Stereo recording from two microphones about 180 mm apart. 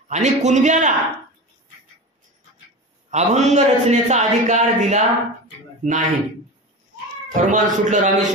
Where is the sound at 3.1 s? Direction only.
40° right (ahead or behind).